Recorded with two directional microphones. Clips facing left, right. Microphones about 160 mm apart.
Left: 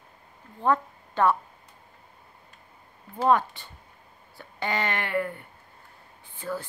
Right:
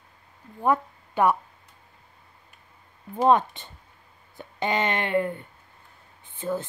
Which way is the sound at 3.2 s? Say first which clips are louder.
Right 2 dB; 20° right (ahead or behind).